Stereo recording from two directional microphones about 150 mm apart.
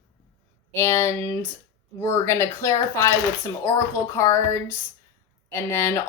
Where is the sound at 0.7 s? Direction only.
15° left (ahead or behind).